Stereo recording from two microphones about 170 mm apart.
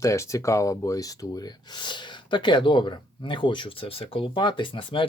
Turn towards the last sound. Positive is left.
turn(degrees=30)  # may be behind; listen again after turning